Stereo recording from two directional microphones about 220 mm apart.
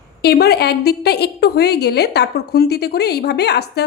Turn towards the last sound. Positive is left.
turn(degrees=45)  # may be behind; listen again after turning